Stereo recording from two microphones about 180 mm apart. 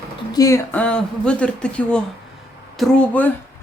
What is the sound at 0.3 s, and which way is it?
Speech, 20° left (ahead or behind).